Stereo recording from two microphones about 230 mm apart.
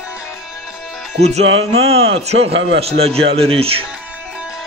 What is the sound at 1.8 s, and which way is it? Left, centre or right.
A man's voice, right.